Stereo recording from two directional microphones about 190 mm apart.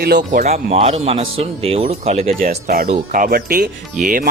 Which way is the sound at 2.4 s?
50° right (ahead or behind).